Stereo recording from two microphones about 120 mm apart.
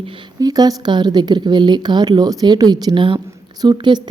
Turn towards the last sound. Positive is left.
turn(degrees=-35)  # may be behind; listen again after turning